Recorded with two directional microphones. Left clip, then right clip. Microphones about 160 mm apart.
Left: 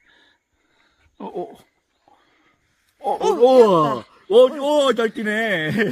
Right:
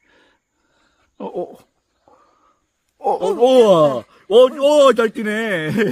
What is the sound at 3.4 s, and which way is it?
Speech, 65° right (ahead or behind).